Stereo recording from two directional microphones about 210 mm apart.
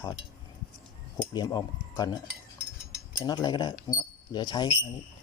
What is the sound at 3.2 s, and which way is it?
Speech, 20° left (ahead or behind).